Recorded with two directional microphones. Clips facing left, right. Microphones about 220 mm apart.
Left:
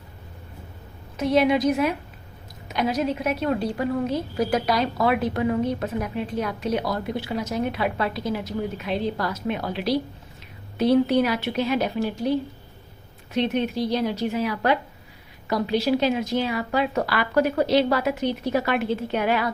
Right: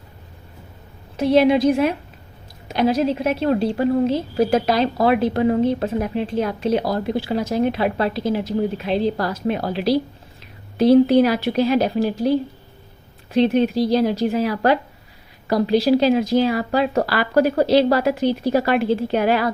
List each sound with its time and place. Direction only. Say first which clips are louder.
1.1 s a woman's voice: right 5 dB; 30° right (ahead or behind)
13.3 s a woman's voice: right 7 dB; 30° right (ahead or behind)